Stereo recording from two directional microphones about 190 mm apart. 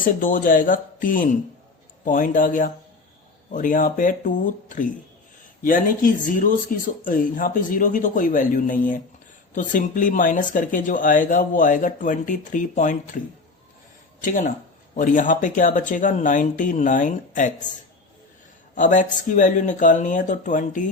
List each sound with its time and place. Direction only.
0.0 s speech: 45° left (ahead or behind)
14.2 s speech: 45° left (ahead or behind)
18.7 s speech: 40° left (ahead or behind)